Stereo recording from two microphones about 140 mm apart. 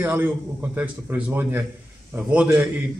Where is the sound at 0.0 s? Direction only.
15° right (ahead or behind).